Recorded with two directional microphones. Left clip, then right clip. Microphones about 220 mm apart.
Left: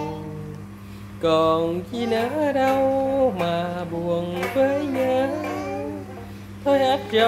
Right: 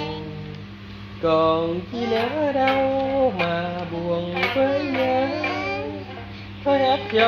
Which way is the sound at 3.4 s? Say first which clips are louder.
Even; 5° left (ahead or behind).